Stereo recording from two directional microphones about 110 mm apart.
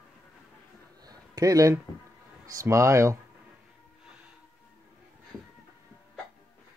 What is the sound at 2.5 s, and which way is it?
Speech, 30° right (ahead or behind).